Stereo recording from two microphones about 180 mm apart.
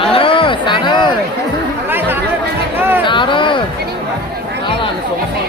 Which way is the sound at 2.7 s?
10° right (ahead or behind).